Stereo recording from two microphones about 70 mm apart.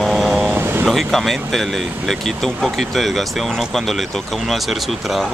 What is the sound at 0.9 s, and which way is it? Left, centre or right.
Speech, centre.